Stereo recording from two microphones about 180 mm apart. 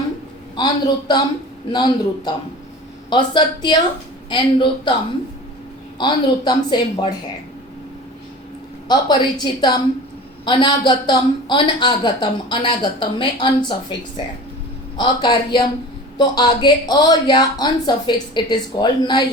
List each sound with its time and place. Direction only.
0.5 s a man's voice: 25° left (ahead or behind)
6.0 s a man's voice: 25° left (ahead or behind)
8.9 s a man's voice: 25° left (ahead or behind)
14.9 s a man's voice: 25° left (ahead or behind)